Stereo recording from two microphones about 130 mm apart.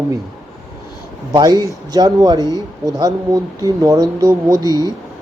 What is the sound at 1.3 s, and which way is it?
Speech, 30° right (ahead or behind).